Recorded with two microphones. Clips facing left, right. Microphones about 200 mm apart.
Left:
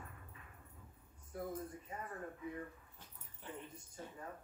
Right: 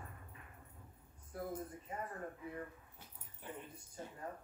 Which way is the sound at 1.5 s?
30° right (ahead or behind).